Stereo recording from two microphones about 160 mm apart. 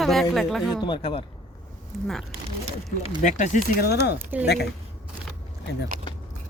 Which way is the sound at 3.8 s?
90° left.